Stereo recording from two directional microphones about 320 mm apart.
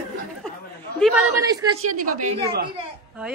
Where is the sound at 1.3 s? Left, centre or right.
Centre.